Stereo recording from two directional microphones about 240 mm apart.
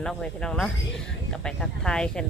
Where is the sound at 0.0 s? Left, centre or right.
Centre.